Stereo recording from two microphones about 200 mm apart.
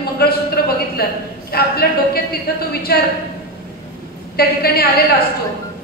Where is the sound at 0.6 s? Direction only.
50° left (ahead or behind).